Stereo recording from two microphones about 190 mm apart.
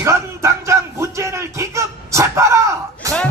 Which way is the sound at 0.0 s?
15° right (ahead or behind).